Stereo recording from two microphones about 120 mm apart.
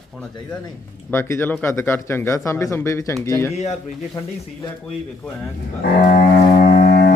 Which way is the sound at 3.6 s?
65° left (ahead or behind).